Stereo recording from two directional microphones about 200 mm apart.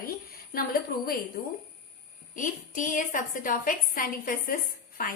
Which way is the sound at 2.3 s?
40° left (ahead or behind).